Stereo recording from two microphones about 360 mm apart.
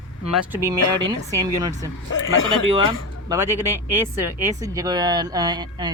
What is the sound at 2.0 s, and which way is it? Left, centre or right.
Speech, left.